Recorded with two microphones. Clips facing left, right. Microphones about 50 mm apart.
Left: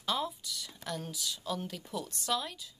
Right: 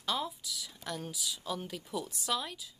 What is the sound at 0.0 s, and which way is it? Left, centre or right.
Speech, centre.